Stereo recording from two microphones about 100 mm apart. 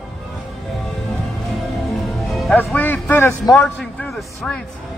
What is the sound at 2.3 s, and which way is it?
Music, centre (ahead or behind).